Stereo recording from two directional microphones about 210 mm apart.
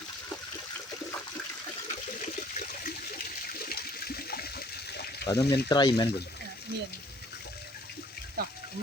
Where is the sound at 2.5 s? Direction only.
45° left (ahead or behind).